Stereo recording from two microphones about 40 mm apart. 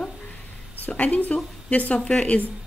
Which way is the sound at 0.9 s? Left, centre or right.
Left.